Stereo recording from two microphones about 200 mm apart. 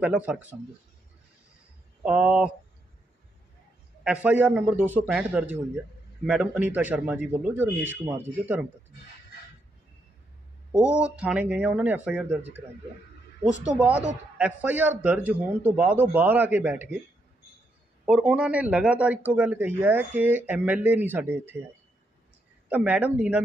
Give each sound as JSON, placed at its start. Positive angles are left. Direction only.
{"t": 0.0, "sound": "a man's voice", "side_deg": -5}
{"t": 2.0, "sound": "speech", "side_deg": -5}
{"t": 4.0, "sound": "a man's voice", "side_deg": -5}
{"t": 10.8, "sound": "a man's voice", "side_deg": -5}
{"t": 13.7, "sound": "a man's voice", "side_deg": -5}
{"t": 18.0, "sound": "a man's voice", "side_deg": -5}
{"t": 22.7, "sound": "a man's voice", "side_deg": -5}